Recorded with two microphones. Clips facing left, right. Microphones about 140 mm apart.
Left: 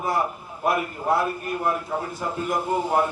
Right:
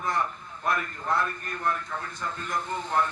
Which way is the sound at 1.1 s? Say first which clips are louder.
Left 6 dB; 10° left (ahead or behind).